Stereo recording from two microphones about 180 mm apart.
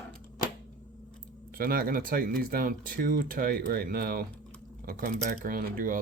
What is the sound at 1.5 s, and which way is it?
Speech, 55° right (ahead or behind).